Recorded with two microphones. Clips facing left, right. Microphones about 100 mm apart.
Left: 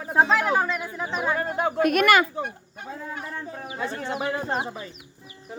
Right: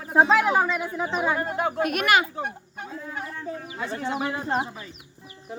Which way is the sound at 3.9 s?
15° right (ahead or behind).